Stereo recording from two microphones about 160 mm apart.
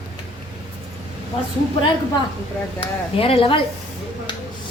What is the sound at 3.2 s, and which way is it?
Speech, 35° left (ahead or behind).